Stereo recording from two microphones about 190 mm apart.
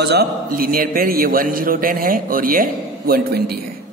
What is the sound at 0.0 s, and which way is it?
A man's voice, 60° right (ahead or behind).